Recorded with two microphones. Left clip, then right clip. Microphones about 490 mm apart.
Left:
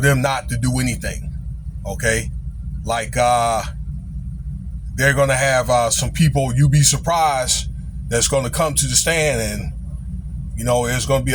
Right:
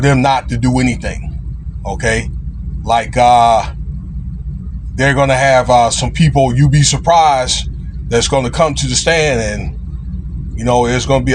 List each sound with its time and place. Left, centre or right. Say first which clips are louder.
0.0 s a man's voice: right 6 dB; left
4.9 s a man's voice: right 4 dB; left
10.7 s a man's voice: right 6 dB; left